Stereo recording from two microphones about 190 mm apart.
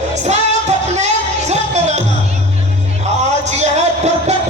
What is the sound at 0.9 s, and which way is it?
Music, 35° right (ahead or behind).